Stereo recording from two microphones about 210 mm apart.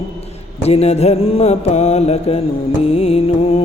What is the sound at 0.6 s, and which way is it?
Music, 30° left (ahead or behind).